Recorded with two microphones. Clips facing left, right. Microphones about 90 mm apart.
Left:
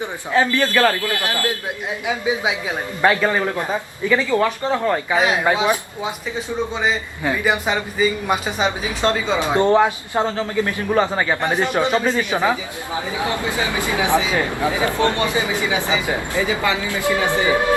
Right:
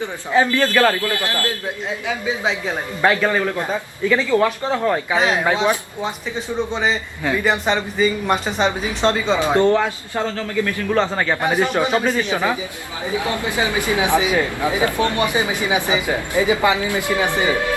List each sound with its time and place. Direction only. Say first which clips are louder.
0.3 s speech: right 1 dB; 15° right (ahead or behind)
1.0 s a man's voice: even; 20° left (ahead or behind)
4.4 s a man's voice: right 1 dB; centre (ahead or behind)
9.6 s a man's voice: left 1 dB; 20° left (ahead or behind)
10.9 s a man's voice: left 1 dB; 10° left (ahead or behind)
11.3 s a man's voice: right 3 dB; 5° right (ahead or behind)
12.1 s a man's voice: left 1 dB; 20° left (ahead or behind)
13.4 s speech: right 1 dB; 20° right (ahead or behind)